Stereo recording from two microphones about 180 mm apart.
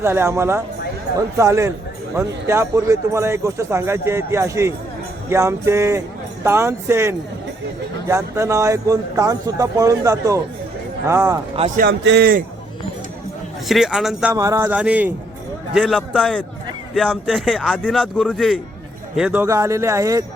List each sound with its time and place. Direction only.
0.0 s speech: 15° right (ahead or behind)
11.8 s a man's voice: 70° right (ahead or behind)
13.7 s a man's voice: centre (ahead or behind)
14.3 s a man's voice: 20° right (ahead or behind)